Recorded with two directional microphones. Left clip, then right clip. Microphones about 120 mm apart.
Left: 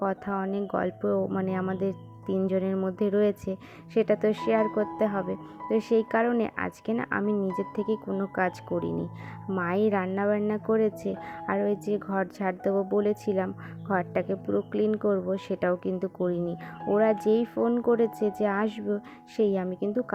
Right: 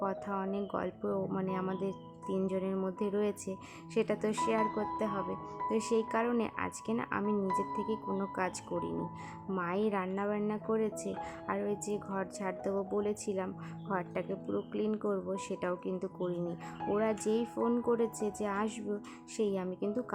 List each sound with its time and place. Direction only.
0.0 s speech: 30° left (ahead or behind)